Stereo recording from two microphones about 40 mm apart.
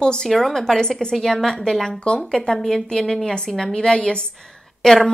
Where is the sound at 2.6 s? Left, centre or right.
Centre; by 4.2 s left.